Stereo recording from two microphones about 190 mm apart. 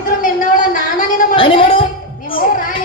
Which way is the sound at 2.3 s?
45° left (ahead or behind).